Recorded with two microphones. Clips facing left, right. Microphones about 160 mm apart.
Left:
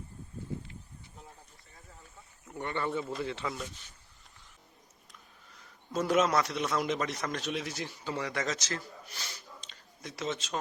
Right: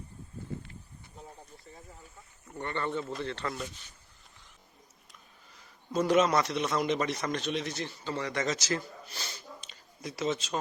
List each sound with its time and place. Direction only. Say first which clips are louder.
2.5 s a man's voice: even; 5° left (ahead or behind)
5.9 s a man's voice: right 2 dB; centre (ahead or behind)
9.0 s speech: right 3 dB; 30° right (ahead or behind)
9.6 s a sound: right 5 dB; 5° right (ahead or behind)